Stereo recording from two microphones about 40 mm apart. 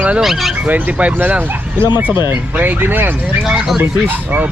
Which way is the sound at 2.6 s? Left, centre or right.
Right.